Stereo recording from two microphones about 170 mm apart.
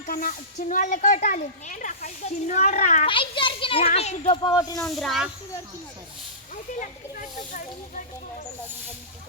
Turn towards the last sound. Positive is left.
turn(degrees=55)  # may be behind; listen again after turning